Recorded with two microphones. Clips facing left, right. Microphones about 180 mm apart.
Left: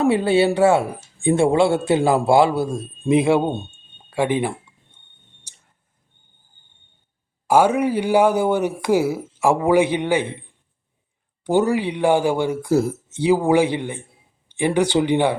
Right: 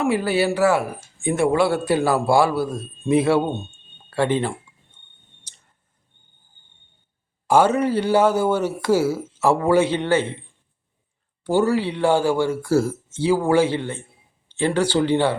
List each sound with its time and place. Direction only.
0.0 s speech: 25° left (ahead or behind)
7.4 s speech: 10° left (ahead or behind)
11.4 s speech: 15° left (ahead or behind)